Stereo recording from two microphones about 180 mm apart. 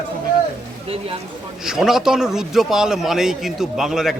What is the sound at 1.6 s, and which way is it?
Speech, 5° right (ahead or behind).